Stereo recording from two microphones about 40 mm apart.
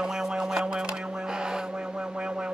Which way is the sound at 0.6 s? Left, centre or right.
Right.